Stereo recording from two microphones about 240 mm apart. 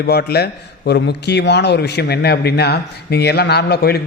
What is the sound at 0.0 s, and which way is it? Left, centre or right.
A man's voice, left.